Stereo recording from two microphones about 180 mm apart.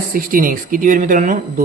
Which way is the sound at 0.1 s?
50° right (ahead or behind).